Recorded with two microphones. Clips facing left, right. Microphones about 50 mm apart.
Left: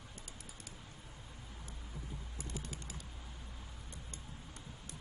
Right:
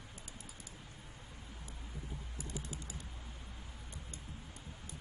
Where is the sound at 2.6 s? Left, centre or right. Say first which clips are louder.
Right 1 dB; left.